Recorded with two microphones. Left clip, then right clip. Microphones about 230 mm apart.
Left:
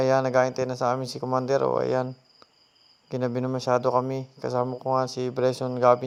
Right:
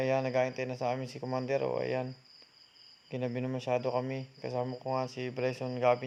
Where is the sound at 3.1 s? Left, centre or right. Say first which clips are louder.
Left 8 dB; left.